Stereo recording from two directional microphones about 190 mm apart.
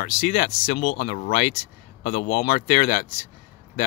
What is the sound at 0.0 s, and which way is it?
Speech, 40° left (ahead or behind).